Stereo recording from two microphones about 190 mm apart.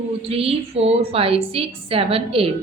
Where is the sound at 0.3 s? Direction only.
30° right (ahead or behind).